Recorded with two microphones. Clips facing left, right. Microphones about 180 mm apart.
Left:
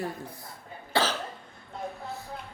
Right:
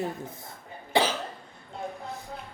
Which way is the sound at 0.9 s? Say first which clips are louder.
Right 2 dB; 15° right (ahead or behind).